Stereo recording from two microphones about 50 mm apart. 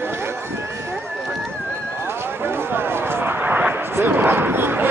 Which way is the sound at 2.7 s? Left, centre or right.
Right.